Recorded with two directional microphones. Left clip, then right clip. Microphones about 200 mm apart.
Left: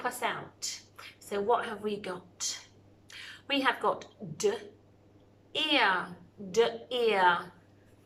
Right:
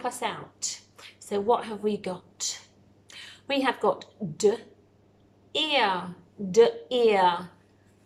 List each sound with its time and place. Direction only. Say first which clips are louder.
0.0 s a woman's voice: right 2 dB; 20° right (ahead or behind)